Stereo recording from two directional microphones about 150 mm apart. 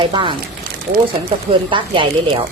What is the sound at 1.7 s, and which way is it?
Speech, 35° right (ahead or behind).